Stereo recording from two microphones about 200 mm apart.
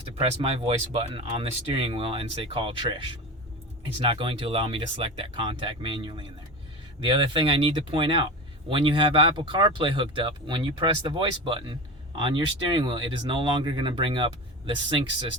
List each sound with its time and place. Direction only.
0.2 s speech: 30° right (ahead or behind)
4.0 s speech: 25° right (ahead or behind)